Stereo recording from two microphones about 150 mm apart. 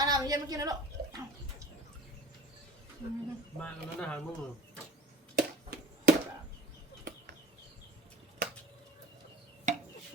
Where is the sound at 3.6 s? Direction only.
5° left (ahead or behind).